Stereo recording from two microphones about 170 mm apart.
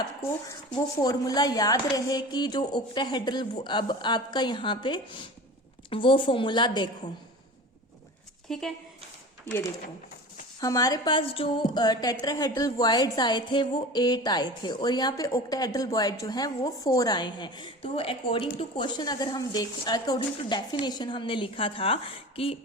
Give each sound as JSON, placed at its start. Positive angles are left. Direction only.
{"t": 0.7, "sound": "a woman's voice", "side_deg": 20}
{"t": 8.5, "sound": "speech", "side_deg": 0}
{"t": 10.6, "sound": "a woman's voice", "side_deg": 20}